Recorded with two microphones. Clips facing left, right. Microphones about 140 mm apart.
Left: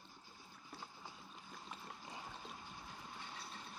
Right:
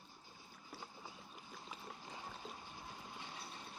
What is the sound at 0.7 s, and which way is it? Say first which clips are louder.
Boat: right 1 dB; 5° right (ahead or behind).